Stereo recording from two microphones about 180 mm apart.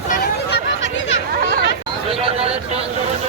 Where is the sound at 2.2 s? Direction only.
35° right (ahead or behind).